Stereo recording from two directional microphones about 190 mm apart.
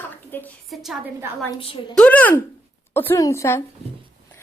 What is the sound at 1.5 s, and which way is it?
Speech, 25° left (ahead or behind).